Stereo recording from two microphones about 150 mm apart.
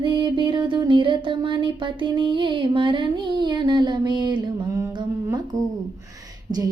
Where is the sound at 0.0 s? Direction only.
30° right (ahead or behind).